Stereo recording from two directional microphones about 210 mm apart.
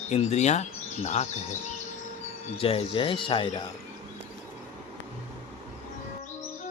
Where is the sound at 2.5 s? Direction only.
25° left (ahead or behind).